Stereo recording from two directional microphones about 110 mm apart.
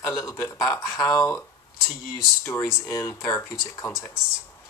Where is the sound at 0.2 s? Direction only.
25° left (ahead or behind).